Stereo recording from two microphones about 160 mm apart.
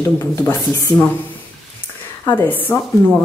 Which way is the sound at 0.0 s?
20° left (ahead or behind).